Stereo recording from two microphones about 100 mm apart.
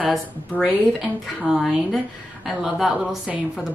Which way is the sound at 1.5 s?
Centre (ahead or behind).